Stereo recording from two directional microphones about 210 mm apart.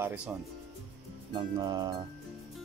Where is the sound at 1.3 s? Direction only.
20° right (ahead or behind).